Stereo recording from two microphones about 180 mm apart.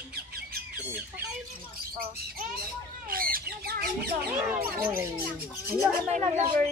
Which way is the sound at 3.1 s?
55° right (ahead or behind).